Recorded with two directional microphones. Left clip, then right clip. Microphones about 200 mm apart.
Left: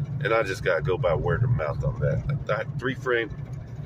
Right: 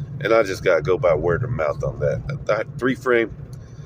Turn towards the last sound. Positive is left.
turn(degrees=-35)  # may be behind; listen again after turning